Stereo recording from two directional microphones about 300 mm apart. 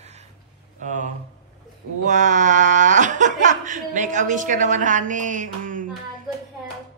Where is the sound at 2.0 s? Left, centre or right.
Right.